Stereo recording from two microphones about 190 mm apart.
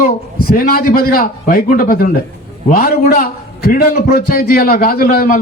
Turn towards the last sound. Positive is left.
turn(degrees=50)  # may be behind; listen again after turning